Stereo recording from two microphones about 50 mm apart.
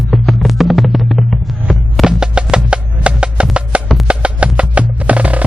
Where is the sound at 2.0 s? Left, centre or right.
Centre.